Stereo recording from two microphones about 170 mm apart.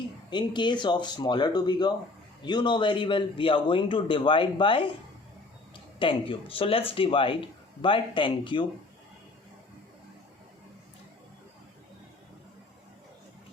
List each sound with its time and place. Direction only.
0.3 s a man's voice: 25° left (ahead or behind)